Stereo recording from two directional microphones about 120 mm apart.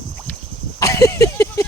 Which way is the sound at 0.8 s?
25° left (ahead or behind).